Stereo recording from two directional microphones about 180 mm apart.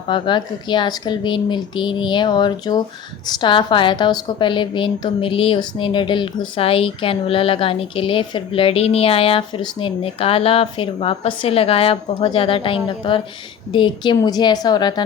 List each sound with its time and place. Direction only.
0.1 s a woman's voice: 25° left (ahead or behind)